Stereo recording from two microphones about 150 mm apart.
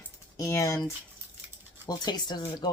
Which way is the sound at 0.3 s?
20° left (ahead or behind).